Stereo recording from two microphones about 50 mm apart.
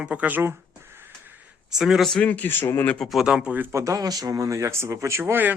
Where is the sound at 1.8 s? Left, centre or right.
Centre.